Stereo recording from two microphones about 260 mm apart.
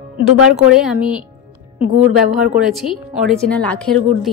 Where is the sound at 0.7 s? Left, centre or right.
Centre.